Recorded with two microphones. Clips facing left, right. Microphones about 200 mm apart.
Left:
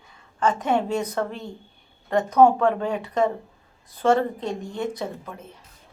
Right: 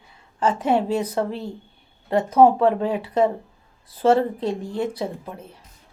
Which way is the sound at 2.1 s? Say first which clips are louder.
Right 1 dB; 5° right (ahead or behind).